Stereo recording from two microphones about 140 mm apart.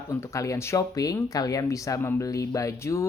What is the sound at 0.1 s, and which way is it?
Speech, 25° left (ahead or behind).